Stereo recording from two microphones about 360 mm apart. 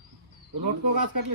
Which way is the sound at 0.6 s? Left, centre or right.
Right.